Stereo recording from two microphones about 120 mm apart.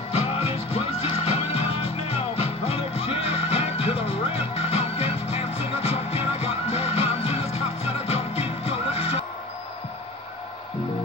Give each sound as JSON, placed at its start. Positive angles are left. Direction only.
{"t": 0.1, "sound": "music", "side_deg": 55}